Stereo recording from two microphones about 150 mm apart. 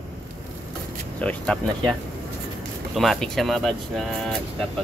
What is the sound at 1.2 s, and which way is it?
Speech, 5° left (ahead or behind).